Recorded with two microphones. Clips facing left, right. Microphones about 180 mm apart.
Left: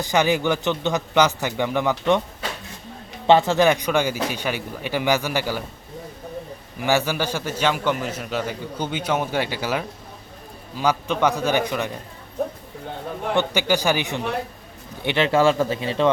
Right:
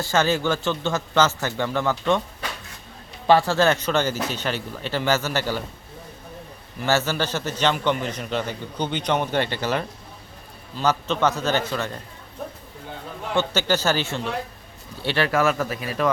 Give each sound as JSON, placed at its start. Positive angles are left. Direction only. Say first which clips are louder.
{"t": 0.0, "sound": "a man's voice", "louder": "left 1 dB", "side_deg": 15}
{"t": 3.2, "sound": "a man's voice", "louder": "left 2 dB", "side_deg": 20}
{"t": 6.7, "sound": "a man's voice", "louder": "left 1 dB", "side_deg": 15}
{"t": 13.3, "sound": "a man's voice", "louder": "left 1 dB", "side_deg": 15}